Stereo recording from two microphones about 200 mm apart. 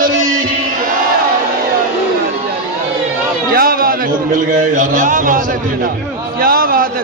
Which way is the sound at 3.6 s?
45° right (ahead or behind).